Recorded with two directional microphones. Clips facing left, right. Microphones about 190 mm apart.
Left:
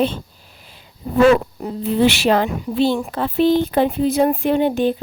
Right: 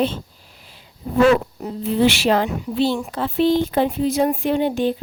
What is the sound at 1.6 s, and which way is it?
A woman's voice, 55° left (ahead or behind).